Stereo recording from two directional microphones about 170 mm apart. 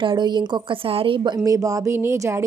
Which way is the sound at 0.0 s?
30° right (ahead or behind).